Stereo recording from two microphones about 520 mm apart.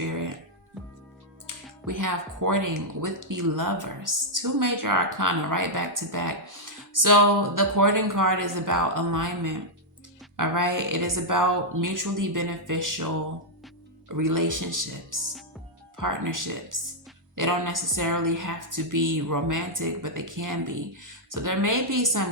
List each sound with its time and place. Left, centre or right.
0.0 s music: right
1.5 s music: right
1.9 s speech: right
14.1 s speech: right